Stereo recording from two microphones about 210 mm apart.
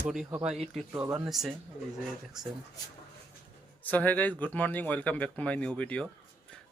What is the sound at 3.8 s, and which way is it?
Speech, 10° left (ahead or behind).